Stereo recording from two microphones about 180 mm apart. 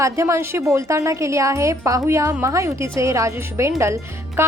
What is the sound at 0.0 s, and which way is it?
Speech, 15° right (ahead or behind).